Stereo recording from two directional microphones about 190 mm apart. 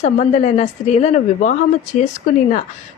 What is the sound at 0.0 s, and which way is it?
A woman's voice, 35° left (ahead or behind).